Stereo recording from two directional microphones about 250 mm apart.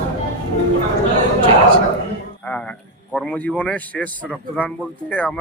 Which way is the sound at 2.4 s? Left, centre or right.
Centre.